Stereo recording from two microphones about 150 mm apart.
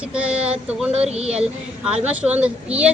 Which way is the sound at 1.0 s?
45° right (ahead or behind).